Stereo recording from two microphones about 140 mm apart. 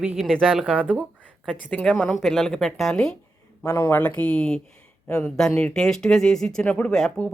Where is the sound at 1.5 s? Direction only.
5° left (ahead or behind).